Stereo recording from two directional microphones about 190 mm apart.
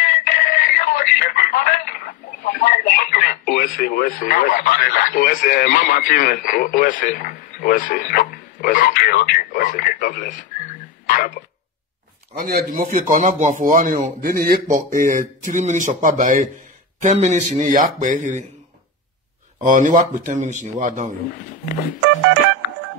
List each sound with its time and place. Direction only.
0.0 s speech: 45° left (ahead or behind)
11.1 s a sound: 45° left (ahead or behind)
12.4 s speech: 50° right (ahead or behind)
19.6 s speech: 45° right (ahead or behind)